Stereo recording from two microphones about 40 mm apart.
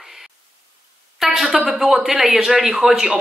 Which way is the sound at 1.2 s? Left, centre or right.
Centre.